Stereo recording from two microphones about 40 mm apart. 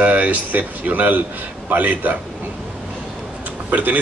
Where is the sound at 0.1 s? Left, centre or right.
Right.